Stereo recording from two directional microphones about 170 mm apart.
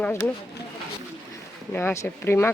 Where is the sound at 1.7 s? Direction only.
10° left (ahead or behind).